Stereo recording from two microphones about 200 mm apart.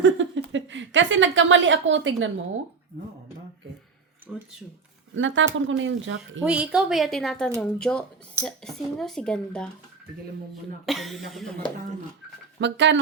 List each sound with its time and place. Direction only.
0.0 s a woman's voice: 70° right (ahead or behind)
4.3 s speech: centre (ahead or behind)
5.1 s speech: 70° right (ahead or behind)
6.4 s speech: 5° right (ahead or behind)
10.8 s speech: centre (ahead or behind)
12.5 s speech: 60° right (ahead or behind)